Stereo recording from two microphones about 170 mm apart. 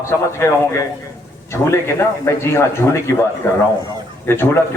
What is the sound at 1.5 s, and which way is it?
A man's voice, 15° left (ahead or behind).